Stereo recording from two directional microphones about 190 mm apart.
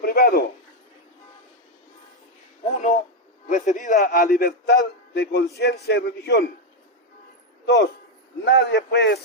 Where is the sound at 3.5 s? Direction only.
40° left (ahead or behind); by 6.5 s 60° left (ahead or behind).